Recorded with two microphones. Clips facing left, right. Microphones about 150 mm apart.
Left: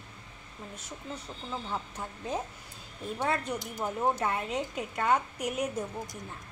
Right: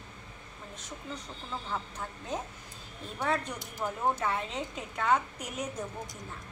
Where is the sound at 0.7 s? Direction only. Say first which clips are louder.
Even; 10° left (ahead or behind).